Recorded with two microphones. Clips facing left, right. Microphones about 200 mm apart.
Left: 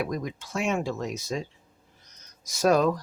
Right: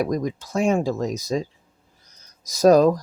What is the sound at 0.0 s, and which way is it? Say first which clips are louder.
Speech: right 7 dB; 40° right (ahead or behind).